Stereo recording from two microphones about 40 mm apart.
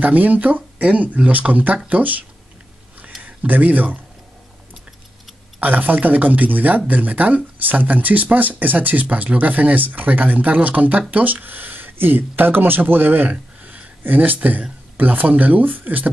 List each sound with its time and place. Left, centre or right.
0.0 s speech: right
5.6 s speech: right